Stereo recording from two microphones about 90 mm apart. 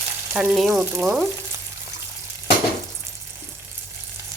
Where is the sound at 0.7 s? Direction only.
25° right (ahead or behind).